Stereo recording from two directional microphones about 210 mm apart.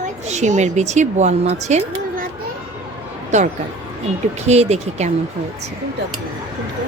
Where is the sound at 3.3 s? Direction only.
35° right (ahead or behind).